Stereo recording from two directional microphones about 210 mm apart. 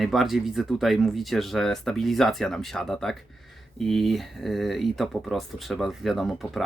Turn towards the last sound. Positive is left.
turn(degrees=0)  # may be behind; listen again after turning